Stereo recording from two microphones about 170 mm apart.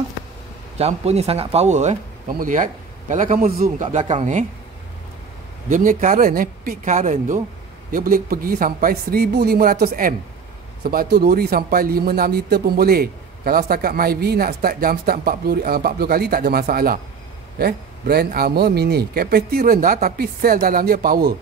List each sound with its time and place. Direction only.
0.7 s a man's voice: 40° right (ahead or behind)
5.7 s a man's voice: 50° right (ahead or behind)